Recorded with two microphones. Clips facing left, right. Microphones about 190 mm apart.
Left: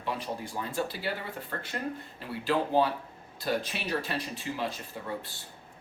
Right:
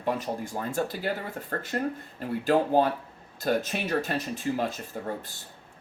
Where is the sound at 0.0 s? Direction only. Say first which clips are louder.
Right 5 dB; 45° right (ahead or behind).